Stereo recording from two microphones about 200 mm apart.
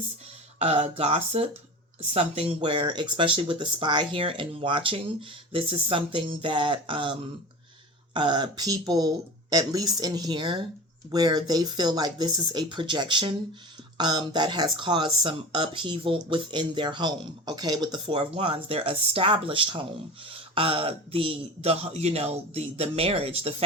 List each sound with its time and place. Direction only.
0.6 s speech: 35° right (ahead or behind)